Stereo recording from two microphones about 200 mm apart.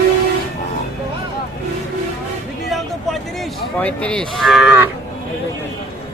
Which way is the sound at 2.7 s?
Centre (ahead or behind).